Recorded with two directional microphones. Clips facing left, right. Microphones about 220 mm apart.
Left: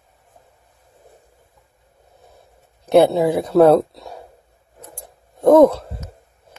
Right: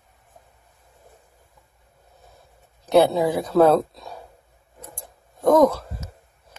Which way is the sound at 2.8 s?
55° left (ahead or behind).